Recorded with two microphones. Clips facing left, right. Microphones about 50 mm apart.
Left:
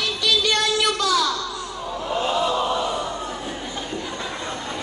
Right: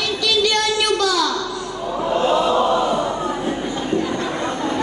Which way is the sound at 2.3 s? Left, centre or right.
Right.